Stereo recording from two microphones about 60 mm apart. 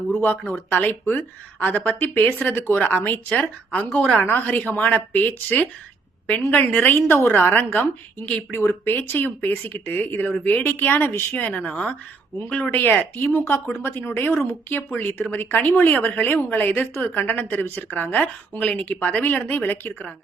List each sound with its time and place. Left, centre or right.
0.1 s a woman's voice: left
2.5 s a woman's voice: left
4.2 s a woman's voice: left
8.5 s a woman's voice: left
10.6 s speech: left
11.3 s a woman's voice: left
12.7 s speech: left